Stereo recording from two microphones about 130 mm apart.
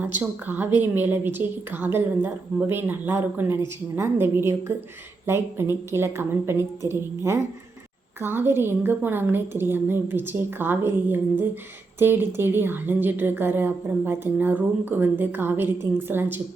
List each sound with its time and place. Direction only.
0.0 s a woman's voice: 15° right (ahead or behind)